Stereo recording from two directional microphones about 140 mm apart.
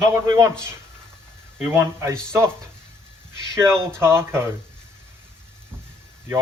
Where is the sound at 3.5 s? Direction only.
20° right (ahead or behind).